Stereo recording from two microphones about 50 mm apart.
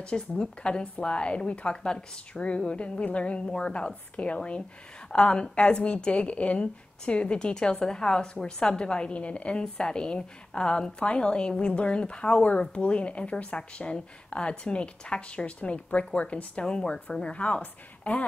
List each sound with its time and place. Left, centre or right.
0.0 s a woman's voice: left